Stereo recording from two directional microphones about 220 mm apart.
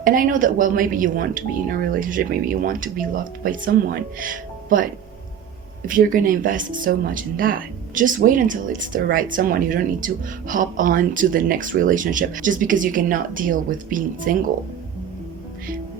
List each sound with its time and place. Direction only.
0.0 s speech: 40° right (ahead or behind)
5.9 s speech: 40° right (ahead or behind)